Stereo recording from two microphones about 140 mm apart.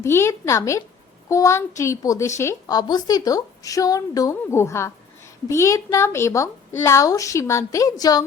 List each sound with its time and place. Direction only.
0.0 s a woman's voice: 20° left (ahead or behind)